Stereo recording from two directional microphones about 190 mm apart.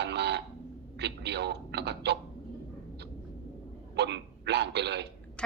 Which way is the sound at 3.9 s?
60° right (ahead or behind).